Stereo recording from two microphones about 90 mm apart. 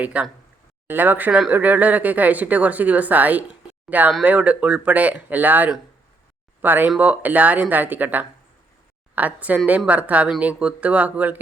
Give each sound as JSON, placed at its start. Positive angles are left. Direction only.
{"t": 0.0, "sound": "speech", "side_deg": -15}